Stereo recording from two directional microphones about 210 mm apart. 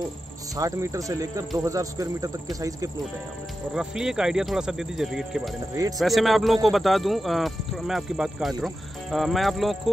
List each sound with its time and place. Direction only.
0.6 s speech: 15° right (ahead or behind)
3.7 s speech: 5° right (ahead or behind)